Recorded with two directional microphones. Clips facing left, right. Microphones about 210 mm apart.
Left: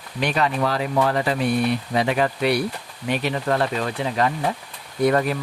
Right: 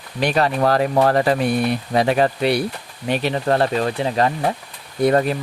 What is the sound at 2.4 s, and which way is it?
Speech, 30° right (ahead or behind).